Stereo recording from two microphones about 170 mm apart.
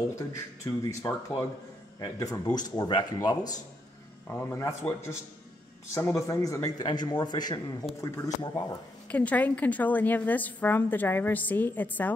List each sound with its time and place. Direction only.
0.1 s a woman's voice: 20° left (ahead or behind)
9.1 s a woman's voice: 10° left (ahead or behind)